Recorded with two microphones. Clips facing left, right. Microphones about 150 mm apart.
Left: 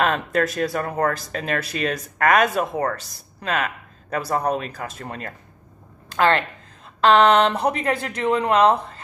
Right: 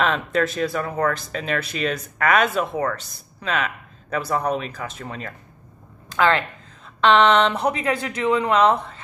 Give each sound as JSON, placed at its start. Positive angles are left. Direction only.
{"t": 0.0, "sound": "speech", "side_deg": 40}
{"t": 7.0, "sound": "speech", "side_deg": 40}